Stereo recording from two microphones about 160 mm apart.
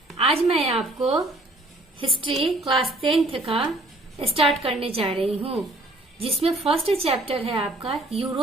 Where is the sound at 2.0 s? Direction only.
35° right (ahead or behind).